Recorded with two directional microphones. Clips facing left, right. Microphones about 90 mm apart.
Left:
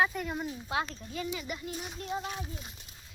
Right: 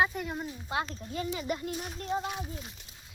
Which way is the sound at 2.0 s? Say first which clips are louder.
Right 4 dB; 35° right (ahead or behind).